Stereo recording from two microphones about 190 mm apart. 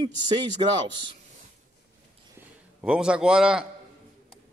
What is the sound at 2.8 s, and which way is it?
Speech, 5° right (ahead or behind).